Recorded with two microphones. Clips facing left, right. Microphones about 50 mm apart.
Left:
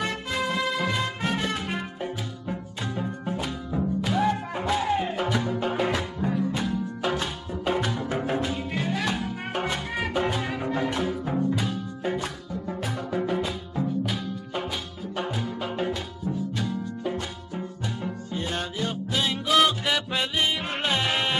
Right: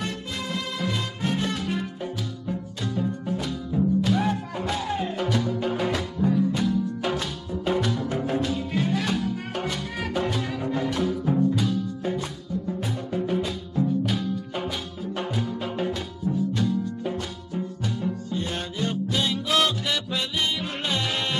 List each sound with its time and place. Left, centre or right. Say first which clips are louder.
0.8 s music: left 1 dB; left
8.7 s music: right 2 dB; centre
9.1 s music: right 2 dB; centre
13.3 s music: right 1 dB; centre
18.5 s music: left 2 dB; centre